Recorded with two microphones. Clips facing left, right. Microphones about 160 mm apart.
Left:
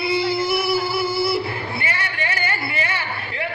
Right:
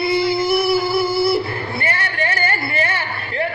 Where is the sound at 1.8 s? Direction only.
45° right (ahead or behind).